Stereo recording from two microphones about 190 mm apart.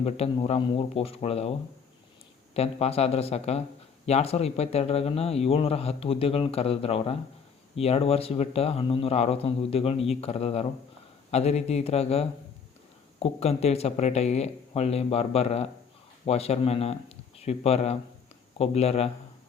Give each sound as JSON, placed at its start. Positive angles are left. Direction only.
{"t": 0.0, "sound": "a man's voice", "side_deg": 35}
{"t": 2.6, "sound": "a man's voice", "side_deg": 35}